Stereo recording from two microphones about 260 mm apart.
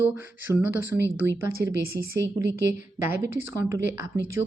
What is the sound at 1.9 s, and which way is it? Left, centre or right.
Speech, right.